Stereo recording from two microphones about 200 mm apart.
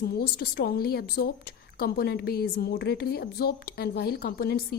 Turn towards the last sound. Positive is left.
turn(degrees=50)  # may be behind; listen again after turning